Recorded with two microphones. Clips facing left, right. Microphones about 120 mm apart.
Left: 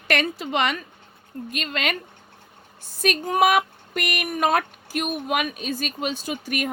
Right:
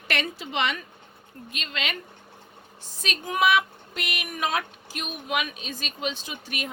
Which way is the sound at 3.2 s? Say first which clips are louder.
Left 2 dB; 45° left (ahead or behind).